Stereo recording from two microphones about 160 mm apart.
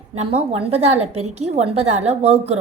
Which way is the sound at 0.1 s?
40° right (ahead or behind).